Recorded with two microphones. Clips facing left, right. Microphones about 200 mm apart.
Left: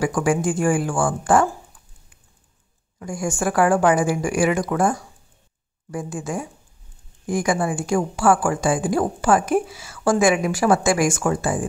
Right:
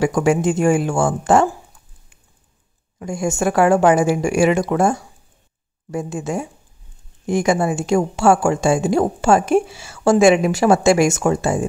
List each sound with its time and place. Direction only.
0.0 s a woman's voice: 25° right (ahead or behind)
3.0 s a woman's voice: 25° right (ahead or behind)